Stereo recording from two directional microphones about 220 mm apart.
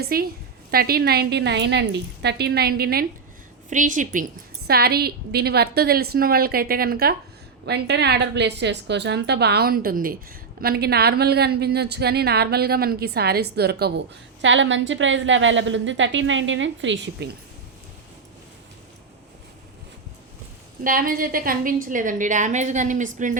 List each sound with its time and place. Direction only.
0.0 s a woman's voice: 45° right (ahead or behind)
14.4 s a woman's voice: 60° right (ahead or behind)
20.8 s a woman's voice: 40° right (ahead or behind)